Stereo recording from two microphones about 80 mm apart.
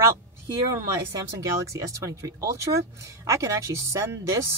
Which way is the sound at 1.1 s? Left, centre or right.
Right.